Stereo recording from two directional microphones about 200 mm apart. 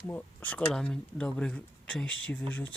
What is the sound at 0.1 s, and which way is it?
Speech, 10° left (ahead or behind).